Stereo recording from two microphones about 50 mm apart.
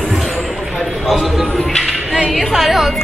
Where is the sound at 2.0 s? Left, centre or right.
Centre.